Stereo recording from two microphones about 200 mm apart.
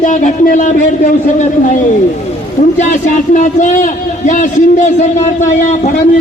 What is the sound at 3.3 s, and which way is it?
A man's voice, 40° left (ahead or behind).